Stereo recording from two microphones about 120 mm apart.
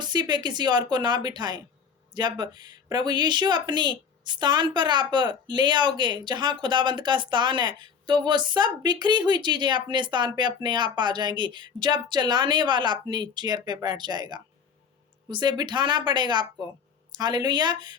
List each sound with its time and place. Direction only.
0.0 s speech: 35° right (ahead or behind)